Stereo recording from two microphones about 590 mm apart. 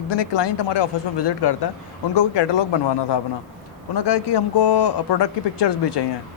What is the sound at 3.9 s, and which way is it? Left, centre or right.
Speech, left.